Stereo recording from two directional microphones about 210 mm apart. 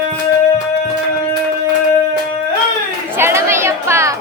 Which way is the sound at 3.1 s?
10° right (ahead or behind).